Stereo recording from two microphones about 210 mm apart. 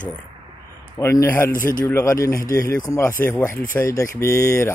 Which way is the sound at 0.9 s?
15° left (ahead or behind).